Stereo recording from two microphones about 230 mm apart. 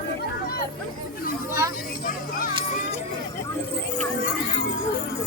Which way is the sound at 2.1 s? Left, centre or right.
Left.